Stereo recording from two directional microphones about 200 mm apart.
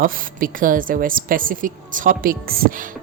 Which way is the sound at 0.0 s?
45° right (ahead or behind).